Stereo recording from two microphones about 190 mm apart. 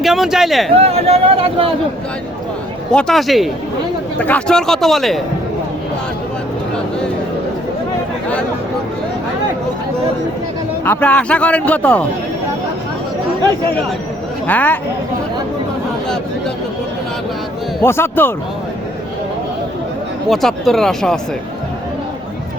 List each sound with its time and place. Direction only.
0.0 s a man's voice: centre (ahead or behind)
0.8 s speech: 30° right (ahead or behind)
2.9 s a man's voice: 5° left (ahead or behind)
10.8 s a man's voice: 5° left (ahead or behind)
14.4 s a man's voice: 10° left (ahead or behind)
17.8 s a man's voice: 10° left (ahead or behind)
20.3 s a man's voice: centre (ahead or behind)